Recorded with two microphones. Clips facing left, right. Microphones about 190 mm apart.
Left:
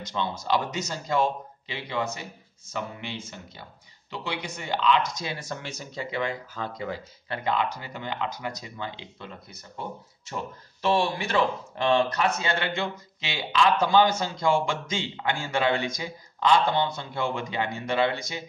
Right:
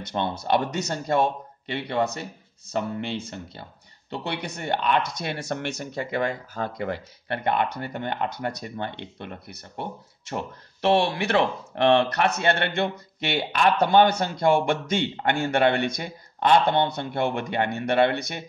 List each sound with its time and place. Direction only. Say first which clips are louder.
0.0 s speech: right 3 dB; 60° right (ahead or behind)